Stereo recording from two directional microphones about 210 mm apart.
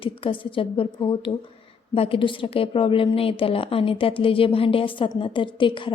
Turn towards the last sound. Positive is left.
turn(degrees=25)  # may be behind; listen again after turning